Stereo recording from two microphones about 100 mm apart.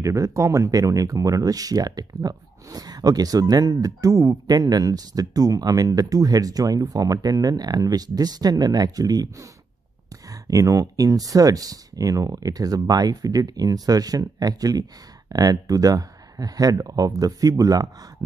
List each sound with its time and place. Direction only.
0.0 s speech: 30° right (ahead or behind)